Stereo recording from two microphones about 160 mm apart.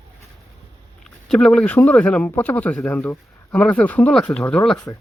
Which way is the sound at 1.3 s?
5° left (ahead or behind).